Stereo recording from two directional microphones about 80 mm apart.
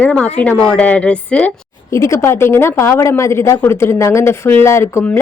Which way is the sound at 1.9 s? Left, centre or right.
Left.